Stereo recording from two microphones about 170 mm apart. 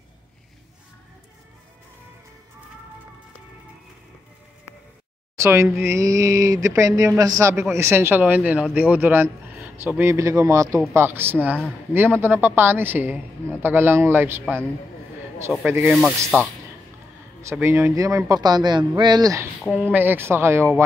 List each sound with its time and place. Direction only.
5.3 s speech: 15° right (ahead or behind)
14.4 s a man's voice: 5° left (ahead or behind)
15.6 s speech: 15° right (ahead or behind)
19.7 s speech: 10° right (ahead or behind)